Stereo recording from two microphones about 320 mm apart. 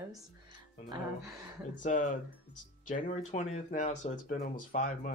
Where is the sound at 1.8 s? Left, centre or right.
Left.